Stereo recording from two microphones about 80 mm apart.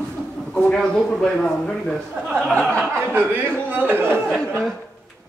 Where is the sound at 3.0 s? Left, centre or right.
Right.